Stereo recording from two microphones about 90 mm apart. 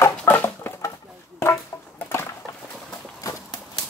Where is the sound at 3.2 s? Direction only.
35° left (ahead or behind).